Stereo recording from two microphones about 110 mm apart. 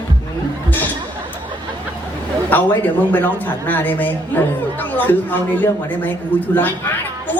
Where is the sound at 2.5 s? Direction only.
15° left (ahead or behind).